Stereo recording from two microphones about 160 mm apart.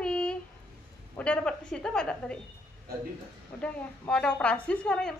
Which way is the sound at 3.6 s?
5° left (ahead or behind).